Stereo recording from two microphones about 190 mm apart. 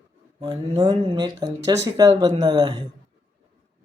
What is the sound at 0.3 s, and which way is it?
Speech, 25° right (ahead or behind).